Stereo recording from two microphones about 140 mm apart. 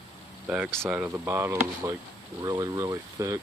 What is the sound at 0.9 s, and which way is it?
Speech, 15° right (ahead or behind).